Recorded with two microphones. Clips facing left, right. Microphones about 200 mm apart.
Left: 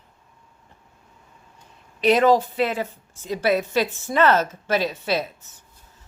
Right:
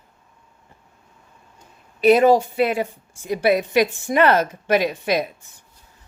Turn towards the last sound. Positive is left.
turn(degrees=-15)  # may be behind; listen again after turning